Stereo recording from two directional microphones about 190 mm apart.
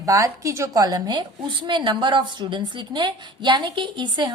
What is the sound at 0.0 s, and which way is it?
A woman's voice, 15° right (ahead or behind).